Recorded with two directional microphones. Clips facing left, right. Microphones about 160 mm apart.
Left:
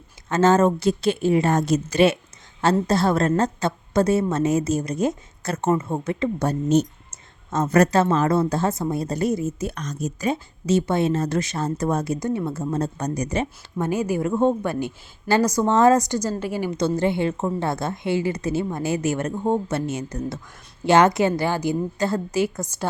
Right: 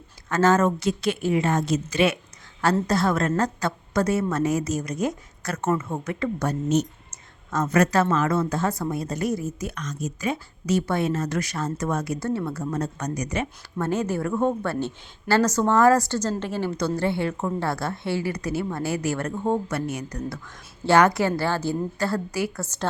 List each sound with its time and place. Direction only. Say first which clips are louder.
0.3 s a woman's voice: left 3 dB; 25° left (ahead or behind); by 2.0 s 40° left (ahead or behind)
2.8 s a woman's voice: left 3 dB; 30° left (ahead or behind)
10.3 s a woman's voice: left 3 dB; 25° left (ahead or behind)
12.7 s a woman's voice: left 3 dB; 30° left (ahead or behind)
13.7 s a woman's voice: left 2 dB; 10° left (ahead or behind)
14.3 s a woman's voice: left 4 dB; 25° left (ahead or behind)
14.6 s a woman's voice: left 1 dB; 15° left (ahead or behind)